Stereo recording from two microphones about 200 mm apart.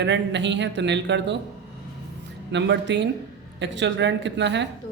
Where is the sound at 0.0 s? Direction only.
60° right (ahead or behind).